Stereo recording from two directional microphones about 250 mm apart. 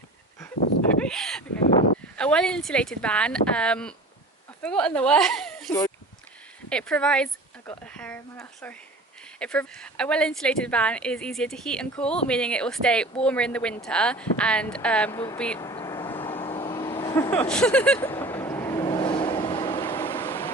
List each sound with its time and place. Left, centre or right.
1.0 s a sound: centre
2.1 s a woman's voice: centre
16.4 s vehicle: centre
19.9 s vehicle: centre